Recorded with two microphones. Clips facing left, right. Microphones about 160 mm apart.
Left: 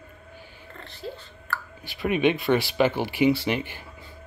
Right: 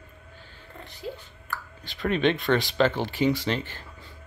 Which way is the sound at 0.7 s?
15° right (ahead or behind).